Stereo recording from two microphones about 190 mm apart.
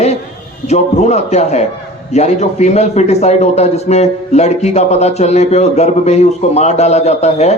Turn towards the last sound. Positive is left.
turn(degrees=35)  # may be behind; listen again after turning